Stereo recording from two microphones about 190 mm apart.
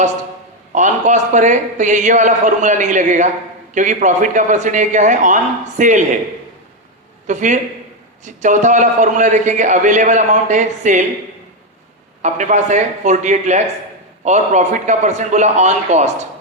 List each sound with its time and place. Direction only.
0.7 s a man's voice: 40° right (ahead or behind)
7.3 s a man's voice: 40° right (ahead or behind)
12.2 s a man's voice: 40° right (ahead or behind)